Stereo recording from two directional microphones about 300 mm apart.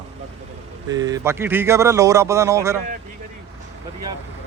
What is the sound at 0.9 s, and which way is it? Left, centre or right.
Speech, centre.